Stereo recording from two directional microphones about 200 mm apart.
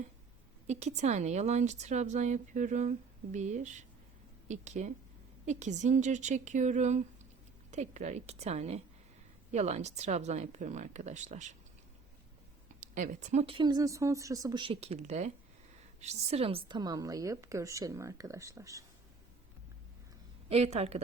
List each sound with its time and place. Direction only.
0.7 s a woman's voice: 35° right (ahead or behind)
12.8 s a woman's voice: 40° right (ahead or behind); by 18.9 s 15° right (ahead or behind)
20.5 s a woman's voice: 30° right (ahead or behind)